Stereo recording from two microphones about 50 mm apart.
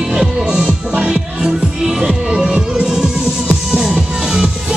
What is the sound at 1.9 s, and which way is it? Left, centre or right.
Music, centre.